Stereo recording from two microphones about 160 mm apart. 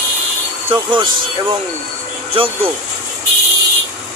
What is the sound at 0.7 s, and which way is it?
Speech, 30° right (ahead or behind).